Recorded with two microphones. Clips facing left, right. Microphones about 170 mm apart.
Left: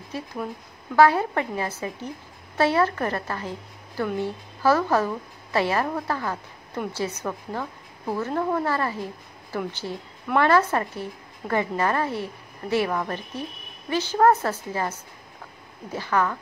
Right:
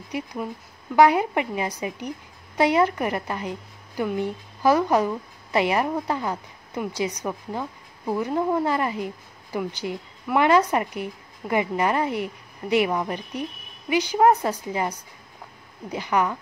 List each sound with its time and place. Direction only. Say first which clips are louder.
0.1 s a woman's voice: right 2 dB; 15° right (ahead or behind)